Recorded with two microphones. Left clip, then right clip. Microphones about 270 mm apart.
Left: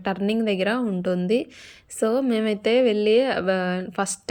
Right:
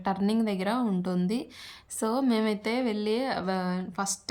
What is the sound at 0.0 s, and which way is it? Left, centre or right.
A woman's voice, centre.